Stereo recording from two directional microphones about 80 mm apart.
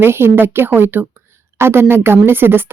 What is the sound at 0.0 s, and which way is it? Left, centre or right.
A woman's voice, right.